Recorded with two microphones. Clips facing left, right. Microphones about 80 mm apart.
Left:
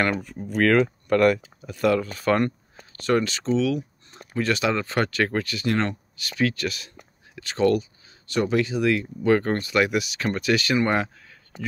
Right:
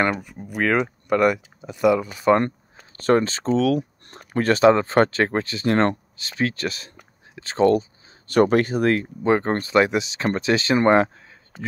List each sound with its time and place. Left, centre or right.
0.0 s speech: centre
3.0 s speech: right
4.5 s speech: right
8.3 s speech: right
9.2 s speech: right